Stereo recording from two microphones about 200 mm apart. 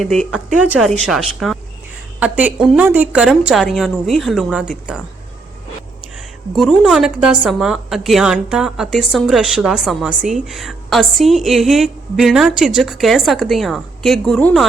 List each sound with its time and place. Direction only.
0.0 s a woman's voice: centre (ahead or behind)
6.6 s a woman's voice: centre (ahead or behind)